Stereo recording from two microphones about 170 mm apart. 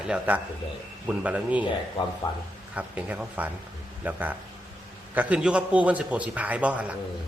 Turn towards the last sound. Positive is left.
turn(degrees=-10)  # may be behind; listen again after turning